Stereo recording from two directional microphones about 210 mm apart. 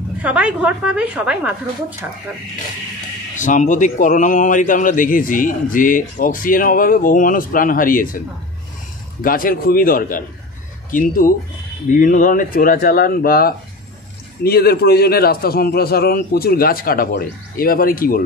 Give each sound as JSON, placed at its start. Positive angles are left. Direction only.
{"t": 0.2, "sound": "a woman's voice", "side_deg": -5}
{"t": 3.3, "sound": "a man's voice", "side_deg": 35}
{"t": 9.2, "sound": "a man's voice", "side_deg": 45}